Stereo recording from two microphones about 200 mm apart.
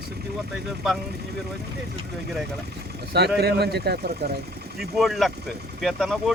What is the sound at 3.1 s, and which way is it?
Speech, 55° right (ahead or behind).